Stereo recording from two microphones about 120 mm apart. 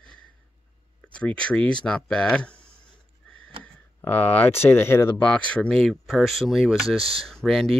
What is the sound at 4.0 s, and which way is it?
Speech, 15° left (ahead or behind).